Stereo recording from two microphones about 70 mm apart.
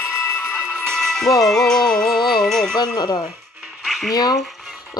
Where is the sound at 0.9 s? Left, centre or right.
Centre.